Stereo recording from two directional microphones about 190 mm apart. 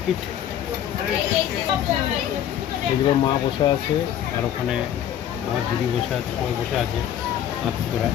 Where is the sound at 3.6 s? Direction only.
25° left (ahead or behind).